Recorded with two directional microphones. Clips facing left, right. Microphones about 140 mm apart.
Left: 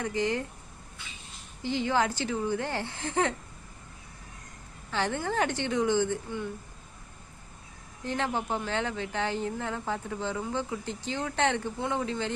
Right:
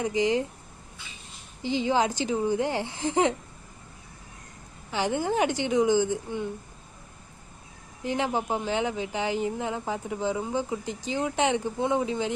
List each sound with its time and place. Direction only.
0.0 s speech: 15° right (ahead or behind)
1.6 s speech: 15° right (ahead or behind)
4.9 s speech: 15° right (ahead or behind)
8.0 s speech: 15° right (ahead or behind)